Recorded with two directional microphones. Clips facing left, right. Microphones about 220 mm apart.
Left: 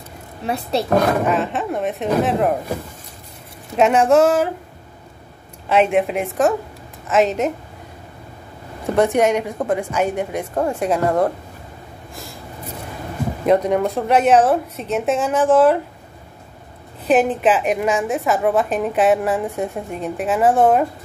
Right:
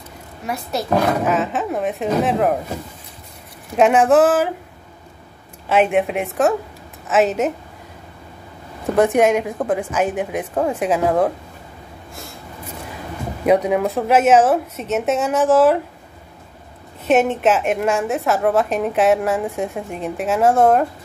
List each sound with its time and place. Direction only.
0.5 s speech: 30° left (ahead or behind)
1.2 s a woman's voice: centre (ahead or behind)
3.7 s a woman's voice: centre (ahead or behind)
5.7 s a woman's voice: centre (ahead or behind)
8.9 s a woman's voice: centre (ahead or behind)
13.5 s a woman's voice: 5° right (ahead or behind)
17.0 s a woman's voice: centre (ahead or behind)